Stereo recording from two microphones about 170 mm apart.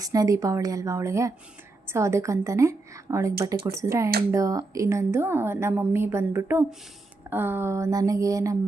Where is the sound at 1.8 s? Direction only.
15° right (ahead or behind).